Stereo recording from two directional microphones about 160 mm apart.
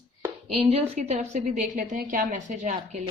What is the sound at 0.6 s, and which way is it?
A woman's voice, 40° right (ahead or behind).